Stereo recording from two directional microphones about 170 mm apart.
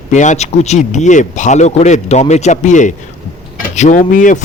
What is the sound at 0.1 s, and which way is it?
Speech, 45° left (ahead or behind).